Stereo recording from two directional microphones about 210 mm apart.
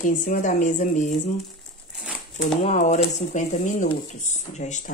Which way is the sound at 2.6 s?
30° left (ahead or behind).